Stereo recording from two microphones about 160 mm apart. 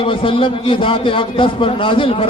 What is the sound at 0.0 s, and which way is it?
A man's voice, 35° left (ahead or behind).